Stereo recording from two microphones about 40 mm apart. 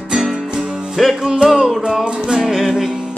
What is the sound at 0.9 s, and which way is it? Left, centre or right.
Music, centre.